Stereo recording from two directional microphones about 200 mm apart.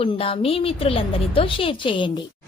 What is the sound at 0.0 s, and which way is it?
Speech, 30° left (ahead or behind).